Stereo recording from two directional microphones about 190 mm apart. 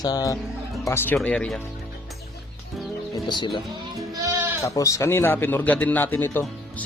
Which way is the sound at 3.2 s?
25° left (ahead or behind).